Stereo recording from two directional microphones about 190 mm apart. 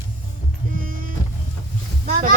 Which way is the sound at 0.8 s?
45° right (ahead or behind).